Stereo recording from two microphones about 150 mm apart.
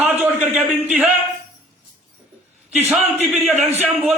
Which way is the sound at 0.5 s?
10° right (ahead or behind).